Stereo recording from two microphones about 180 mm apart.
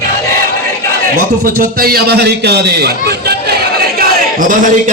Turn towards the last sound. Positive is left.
turn(degrees=-50)  # may be behind; listen again after turning